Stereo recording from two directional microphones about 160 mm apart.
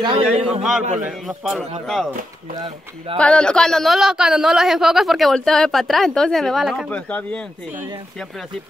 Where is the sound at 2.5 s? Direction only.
30° right (ahead or behind).